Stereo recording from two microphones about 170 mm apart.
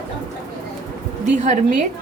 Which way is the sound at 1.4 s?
45° right (ahead or behind).